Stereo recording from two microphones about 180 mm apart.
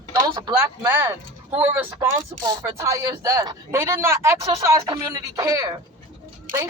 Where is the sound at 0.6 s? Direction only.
10° right (ahead or behind).